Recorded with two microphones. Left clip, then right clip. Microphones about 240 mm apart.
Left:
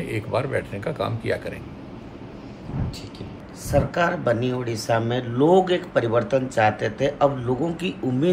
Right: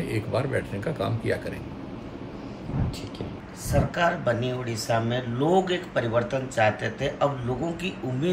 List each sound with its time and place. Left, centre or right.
0.0 s speech: centre
3.7 s speech: centre